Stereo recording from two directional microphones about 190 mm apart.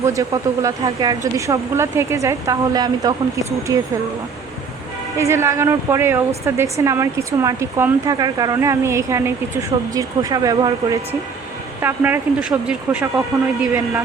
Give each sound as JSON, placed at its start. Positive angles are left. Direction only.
{"t": 0.0, "sound": "speech", "side_deg": -15}
{"t": 5.1, "sound": "speech", "side_deg": -15}